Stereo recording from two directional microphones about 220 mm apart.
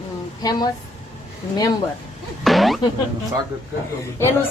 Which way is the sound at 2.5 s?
Centre (ahead or behind).